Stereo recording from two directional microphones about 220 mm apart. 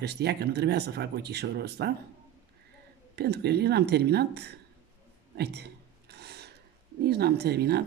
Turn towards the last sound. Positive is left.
turn(degrees=-45)  # may be behind; listen again after turning